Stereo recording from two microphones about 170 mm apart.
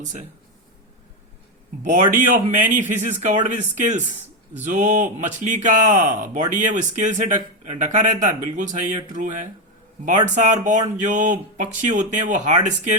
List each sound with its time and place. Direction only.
0.0 s speech: 45° right (ahead or behind)
1.8 s speech: 50° right (ahead or behind)